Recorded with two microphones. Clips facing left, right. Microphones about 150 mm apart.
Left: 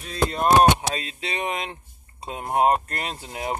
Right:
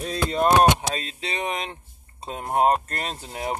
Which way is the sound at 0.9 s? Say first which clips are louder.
Even; 30° right (ahead or behind).